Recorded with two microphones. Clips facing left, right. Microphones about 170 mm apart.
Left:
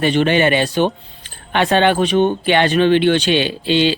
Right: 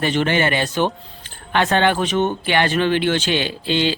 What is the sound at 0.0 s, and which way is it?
A man's voice, 20° left (ahead or behind).